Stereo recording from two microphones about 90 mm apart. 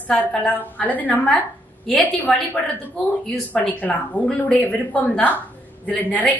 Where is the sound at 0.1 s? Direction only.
15° left (ahead or behind).